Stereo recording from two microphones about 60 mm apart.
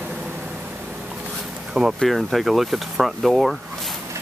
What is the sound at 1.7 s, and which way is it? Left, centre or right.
Speech, centre.